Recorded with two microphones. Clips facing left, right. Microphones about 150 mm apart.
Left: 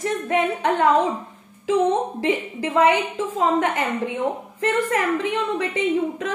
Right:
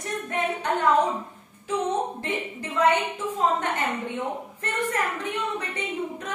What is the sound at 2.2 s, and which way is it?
A woman's voice, 90° left.